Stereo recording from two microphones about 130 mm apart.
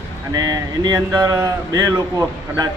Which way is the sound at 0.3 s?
30° right (ahead or behind).